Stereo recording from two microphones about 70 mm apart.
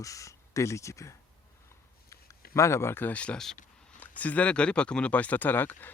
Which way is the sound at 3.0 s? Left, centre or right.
Centre.